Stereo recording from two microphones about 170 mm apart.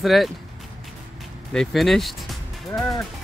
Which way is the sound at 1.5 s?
Centre (ahead or behind).